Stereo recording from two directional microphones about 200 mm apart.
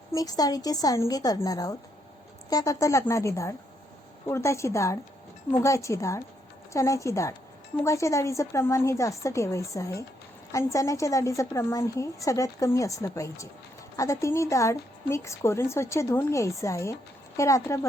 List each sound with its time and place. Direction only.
0.1 s a woman's voice: 20° left (ahead or behind)